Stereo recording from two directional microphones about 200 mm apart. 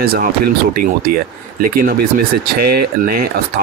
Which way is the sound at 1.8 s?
45° right (ahead or behind).